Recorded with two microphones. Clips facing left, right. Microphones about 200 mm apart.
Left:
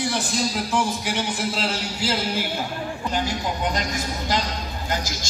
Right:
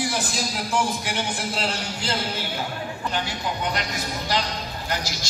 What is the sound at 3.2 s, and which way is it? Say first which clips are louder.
Speech: left 2 dB; 45° left (ahead or behind).